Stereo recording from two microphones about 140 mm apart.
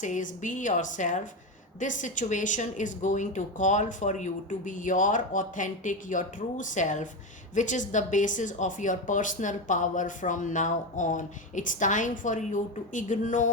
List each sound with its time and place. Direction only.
0.0 s speech: 65° left (ahead or behind)